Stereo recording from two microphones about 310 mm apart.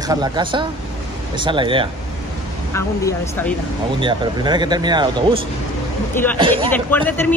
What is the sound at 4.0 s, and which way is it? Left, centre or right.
Speech, centre.